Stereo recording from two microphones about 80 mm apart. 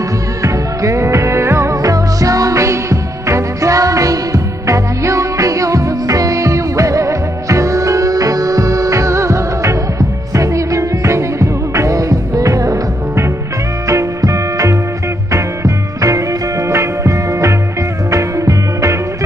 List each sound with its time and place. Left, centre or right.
0.4 s music: right